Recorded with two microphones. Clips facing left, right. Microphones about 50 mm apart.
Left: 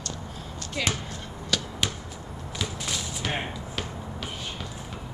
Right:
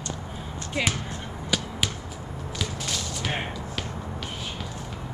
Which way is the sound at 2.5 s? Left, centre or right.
Centre.